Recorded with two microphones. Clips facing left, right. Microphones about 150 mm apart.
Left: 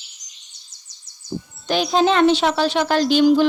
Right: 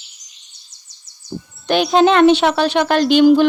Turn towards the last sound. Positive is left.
turn(degrees=-60)  # may be behind; listen again after turning